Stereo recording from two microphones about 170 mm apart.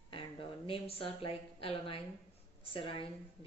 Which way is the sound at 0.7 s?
35° left (ahead or behind).